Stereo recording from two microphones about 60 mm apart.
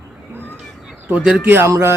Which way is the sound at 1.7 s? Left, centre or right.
Right.